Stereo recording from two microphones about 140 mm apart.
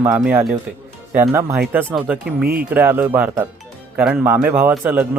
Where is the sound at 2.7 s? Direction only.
15° right (ahead or behind).